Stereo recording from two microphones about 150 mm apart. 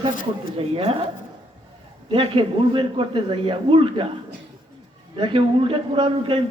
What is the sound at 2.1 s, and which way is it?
Speech, 35° right (ahead or behind).